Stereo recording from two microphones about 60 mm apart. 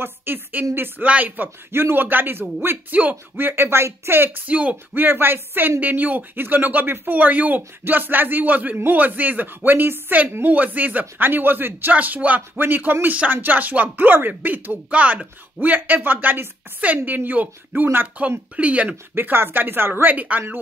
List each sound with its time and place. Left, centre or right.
0.0 s speech: right
4.5 s speech: right
19.1 s speech: right